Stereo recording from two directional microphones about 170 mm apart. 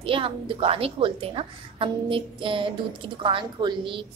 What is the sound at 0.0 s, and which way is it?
A woman's voice, 30° right (ahead or behind).